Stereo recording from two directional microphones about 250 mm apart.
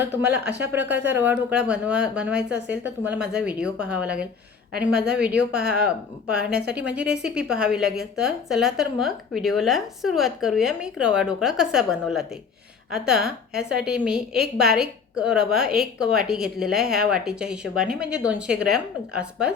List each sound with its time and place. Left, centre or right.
0.3 s speech: right
0.6 s a woman's voice: centre